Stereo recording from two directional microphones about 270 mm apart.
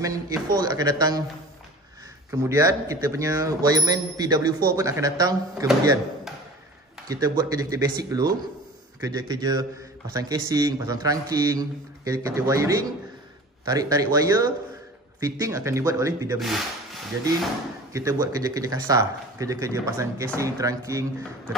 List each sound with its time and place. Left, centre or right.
0.0 s a man's voice: centre
2.3 s a man's voice: centre
7.1 s a man's voice: centre
16.3 s speech: centre
17.9 s a man's voice: centre